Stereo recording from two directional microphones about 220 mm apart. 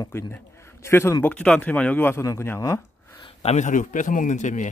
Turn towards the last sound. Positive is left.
turn(degrees=35)  # may be behind; listen again after turning